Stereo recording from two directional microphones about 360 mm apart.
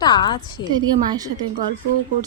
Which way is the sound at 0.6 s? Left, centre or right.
Centre.